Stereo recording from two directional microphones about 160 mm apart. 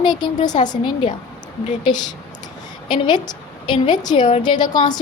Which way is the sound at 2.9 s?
30° left (ahead or behind).